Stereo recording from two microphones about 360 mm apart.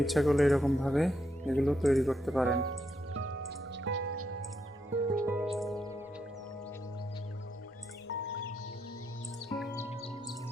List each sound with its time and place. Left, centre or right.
0.0 s speech: centre
2.6 s music: right
5.2 s music: centre
8.0 s music: left
9.5 s music: centre